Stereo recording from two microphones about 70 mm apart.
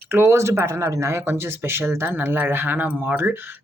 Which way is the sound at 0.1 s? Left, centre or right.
Right.